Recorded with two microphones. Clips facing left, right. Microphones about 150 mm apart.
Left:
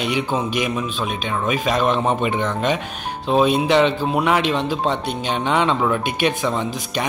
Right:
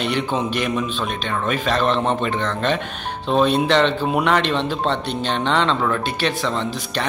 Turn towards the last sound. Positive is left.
turn(degrees=10)  # may be behind; listen again after turning